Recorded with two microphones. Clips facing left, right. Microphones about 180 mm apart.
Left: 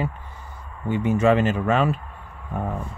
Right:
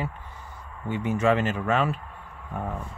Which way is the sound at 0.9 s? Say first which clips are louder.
Left 4 dB; 25° left (ahead or behind).